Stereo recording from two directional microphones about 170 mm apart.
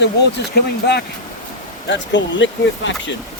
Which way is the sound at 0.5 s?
70° left (ahead or behind).